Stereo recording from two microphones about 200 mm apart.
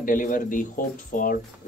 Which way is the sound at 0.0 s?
45° left (ahead or behind).